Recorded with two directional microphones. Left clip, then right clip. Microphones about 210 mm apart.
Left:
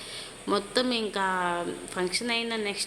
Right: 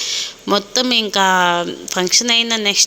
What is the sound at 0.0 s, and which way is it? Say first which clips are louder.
Speech: right 16 dB; 40° right (ahead or behind).